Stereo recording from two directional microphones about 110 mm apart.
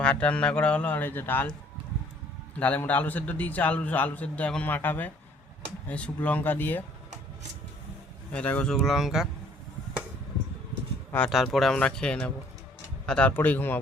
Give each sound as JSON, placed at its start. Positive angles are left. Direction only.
{"t": 0.0, "sound": "a man's voice", "side_deg": 10}
{"t": 2.6, "sound": "a man's voice", "side_deg": 15}
{"t": 8.3, "sound": "speech", "side_deg": 10}
{"t": 11.3, "sound": "a man's voice", "side_deg": 0}